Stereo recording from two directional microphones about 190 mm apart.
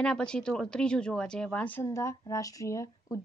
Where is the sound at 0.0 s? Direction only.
5° left (ahead or behind).